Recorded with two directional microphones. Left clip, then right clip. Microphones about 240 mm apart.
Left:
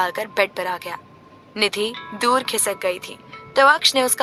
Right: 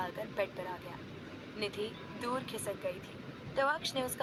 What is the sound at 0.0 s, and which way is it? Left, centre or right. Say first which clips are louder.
A woman's voice: left 16 dB; left.